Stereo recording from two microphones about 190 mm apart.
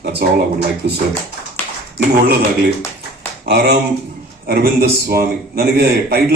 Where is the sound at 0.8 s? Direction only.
60° right (ahead or behind).